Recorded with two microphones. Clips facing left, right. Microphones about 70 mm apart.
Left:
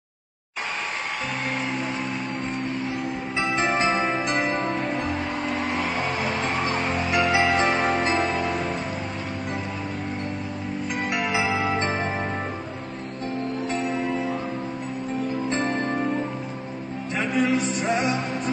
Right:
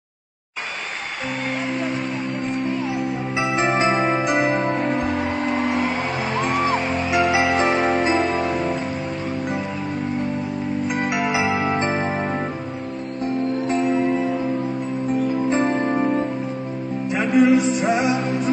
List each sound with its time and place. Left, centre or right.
3.3 s music: centre
7.1 s music: centre
8.1 s music: centre
10.9 s music: centre
13.7 s music: centre
15.5 s music: centre
17.1 s music: centre